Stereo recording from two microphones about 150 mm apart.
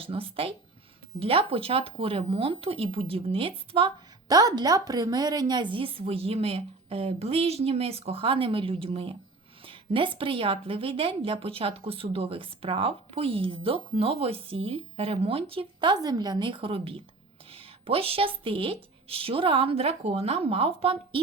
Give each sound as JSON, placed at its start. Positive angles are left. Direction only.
{"t": 0.0, "sound": "a woman's voice", "side_deg": -40}
{"t": 4.3, "sound": "a woman's voice", "side_deg": -25}